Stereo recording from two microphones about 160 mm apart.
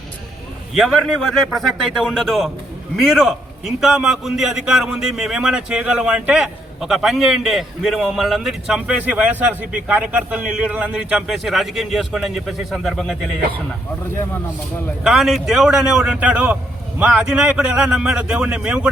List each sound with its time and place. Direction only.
0.7 s a man's voice: centre (ahead or behind)
15.0 s a man's voice: centre (ahead or behind)